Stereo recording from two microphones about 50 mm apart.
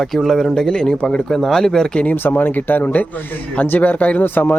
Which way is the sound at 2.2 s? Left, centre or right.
Left.